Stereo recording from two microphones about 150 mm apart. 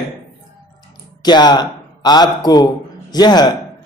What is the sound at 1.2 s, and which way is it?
Speech, 30° left (ahead or behind).